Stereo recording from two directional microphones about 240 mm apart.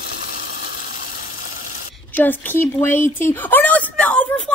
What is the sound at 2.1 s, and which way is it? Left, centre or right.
A woman's voice, centre.